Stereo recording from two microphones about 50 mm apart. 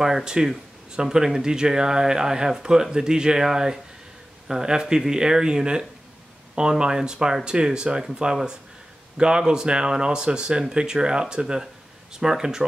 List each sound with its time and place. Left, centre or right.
0.0 s speech: centre